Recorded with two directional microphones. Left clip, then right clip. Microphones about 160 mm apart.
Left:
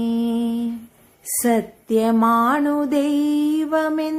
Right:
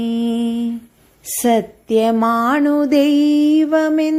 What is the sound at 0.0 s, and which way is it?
Humming, 20° right (ahead or behind).